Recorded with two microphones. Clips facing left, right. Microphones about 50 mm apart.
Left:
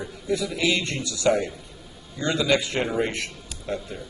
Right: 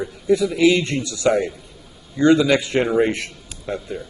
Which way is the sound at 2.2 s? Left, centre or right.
Right.